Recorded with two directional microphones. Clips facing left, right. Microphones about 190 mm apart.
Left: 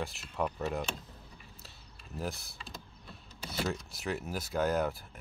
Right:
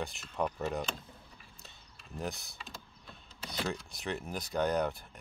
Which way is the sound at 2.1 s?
Centre (ahead or behind).